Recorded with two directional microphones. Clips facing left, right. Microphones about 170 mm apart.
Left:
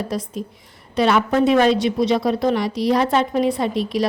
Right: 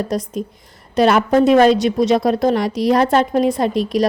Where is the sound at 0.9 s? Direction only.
45° right (ahead or behind).